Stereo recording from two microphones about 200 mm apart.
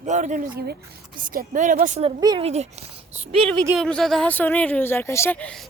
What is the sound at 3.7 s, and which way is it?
A woman's voice, centre (ahead or behind).